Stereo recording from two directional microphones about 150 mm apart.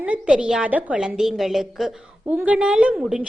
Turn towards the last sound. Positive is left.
turn(degrees=-5)  # may be behind; listen again after turning